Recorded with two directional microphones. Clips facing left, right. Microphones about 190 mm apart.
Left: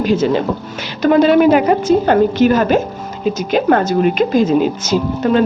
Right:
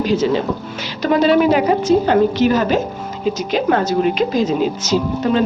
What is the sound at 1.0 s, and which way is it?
A woman's voice, 50° left (ahead or behind).